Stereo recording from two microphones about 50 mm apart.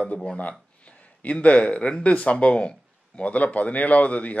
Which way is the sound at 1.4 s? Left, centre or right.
Left.